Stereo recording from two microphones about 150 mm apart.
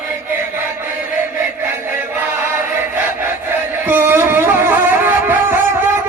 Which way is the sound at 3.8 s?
15° right (ahead or behind).